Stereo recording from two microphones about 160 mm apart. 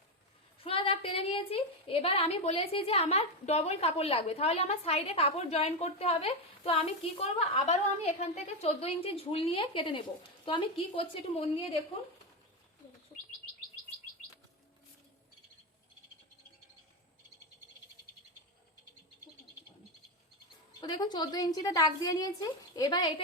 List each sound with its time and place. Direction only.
0.6 s a woman's voice: 35° left (ahead or behind)
20.8 s a woman's voice: 25° left (ahead or behind)